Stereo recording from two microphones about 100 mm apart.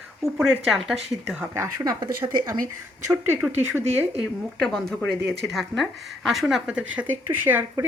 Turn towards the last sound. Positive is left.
turn(degrees=-20)  # may be behind; listen again after turning